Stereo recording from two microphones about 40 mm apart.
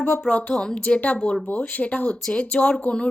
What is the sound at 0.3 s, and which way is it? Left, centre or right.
Speech, left.